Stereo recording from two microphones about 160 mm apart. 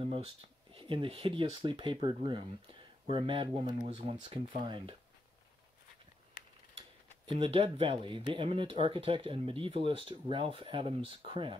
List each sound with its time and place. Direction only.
0.0 s speech: 35° right (ahead or behind)
7.3 s speech: 35° right (ahead or behind)